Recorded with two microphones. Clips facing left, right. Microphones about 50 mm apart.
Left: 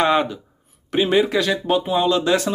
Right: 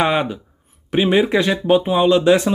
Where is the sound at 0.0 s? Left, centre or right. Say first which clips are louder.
Even; centre.